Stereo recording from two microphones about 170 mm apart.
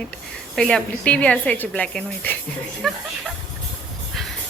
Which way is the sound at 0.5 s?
5° left (ahead or behind).